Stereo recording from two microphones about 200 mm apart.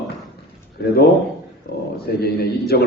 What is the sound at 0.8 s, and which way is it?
Speech, 50° left (ahead or behind).